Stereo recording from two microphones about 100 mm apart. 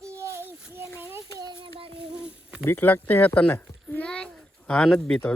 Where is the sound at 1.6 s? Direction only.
65° right (ahead or behind).